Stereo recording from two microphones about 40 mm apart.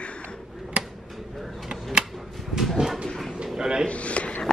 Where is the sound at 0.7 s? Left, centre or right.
Right.